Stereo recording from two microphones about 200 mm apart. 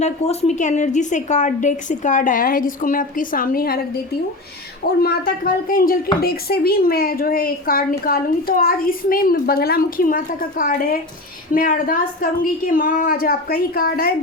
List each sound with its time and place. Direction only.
0.0 s a woman's voice: 35° left (ahead or behind)